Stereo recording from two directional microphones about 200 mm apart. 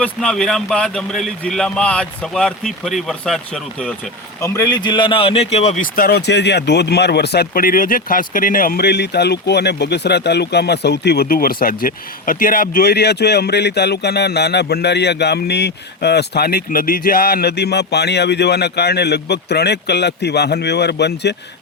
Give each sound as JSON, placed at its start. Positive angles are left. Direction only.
{"t": 0.0, "sound": "speech", "side_deg": 5}
{"t": 4.4, "sound": "speech", "side_deg": 15}